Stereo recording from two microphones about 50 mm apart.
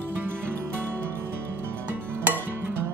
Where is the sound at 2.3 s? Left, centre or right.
Right.